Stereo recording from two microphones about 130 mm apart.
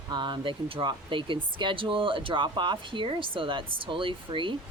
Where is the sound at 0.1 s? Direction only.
35° right (ahead or behind).